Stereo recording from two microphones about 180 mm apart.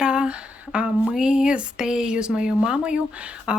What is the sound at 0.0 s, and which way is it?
A woman's voice, 5° right (ahead or behind).